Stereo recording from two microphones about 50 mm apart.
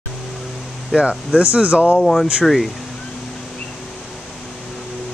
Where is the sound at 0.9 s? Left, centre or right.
Centre.